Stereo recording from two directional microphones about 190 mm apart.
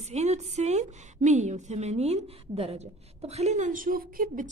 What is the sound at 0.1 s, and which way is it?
A woman's voice, 35° right (ahead or behind).